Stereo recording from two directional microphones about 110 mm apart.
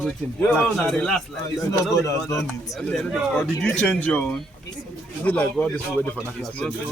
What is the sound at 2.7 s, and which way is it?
Speech, centre (ahead or behind).